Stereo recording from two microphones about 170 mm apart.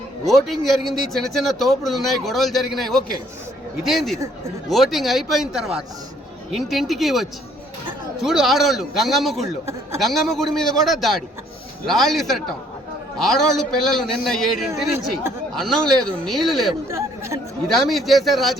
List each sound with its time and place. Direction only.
0.3 s speech: centre (ahead or behind)
16.9 s speech: 15° right (ahead or behind)
17.7 s speech: centre (ahead or behind)